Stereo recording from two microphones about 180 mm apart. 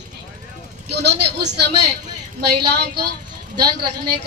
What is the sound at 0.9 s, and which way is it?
Speech, 65° right (ahead or behind).